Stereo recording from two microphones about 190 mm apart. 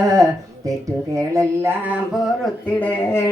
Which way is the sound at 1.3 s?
15° right (ahead or behind).